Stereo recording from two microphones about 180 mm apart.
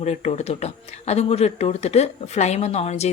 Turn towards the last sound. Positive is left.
turn(degrees=35)  # may be behind; listen again after turning